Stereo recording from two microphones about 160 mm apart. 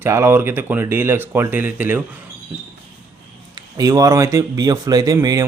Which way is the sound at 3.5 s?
20° right (ahead or behind).